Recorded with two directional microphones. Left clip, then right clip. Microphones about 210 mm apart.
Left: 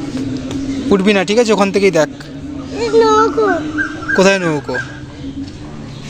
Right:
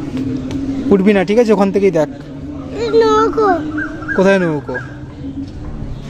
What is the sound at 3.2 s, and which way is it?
Speech, 35° right (ahead or behind).